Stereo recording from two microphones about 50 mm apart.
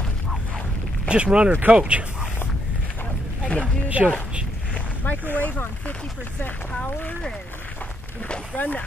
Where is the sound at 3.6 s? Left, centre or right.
Right.